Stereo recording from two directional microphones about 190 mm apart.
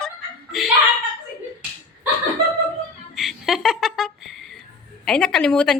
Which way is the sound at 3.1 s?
Centre (ahead or behind).